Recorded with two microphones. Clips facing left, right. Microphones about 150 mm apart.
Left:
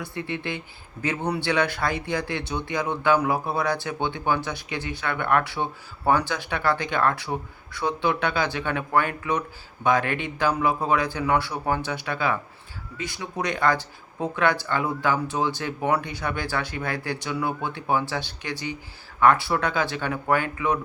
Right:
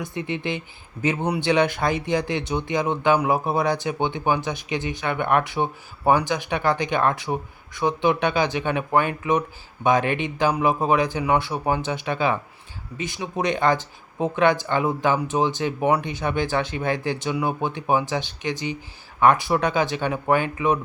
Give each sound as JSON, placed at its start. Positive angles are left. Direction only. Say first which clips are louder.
{"t": 0.0, "sound": "speech", "louder": "right 3 dB", "side_deg": -20}